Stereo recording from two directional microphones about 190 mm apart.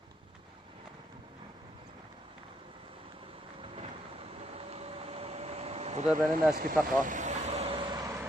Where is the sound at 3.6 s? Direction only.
30° right (ahead or behind).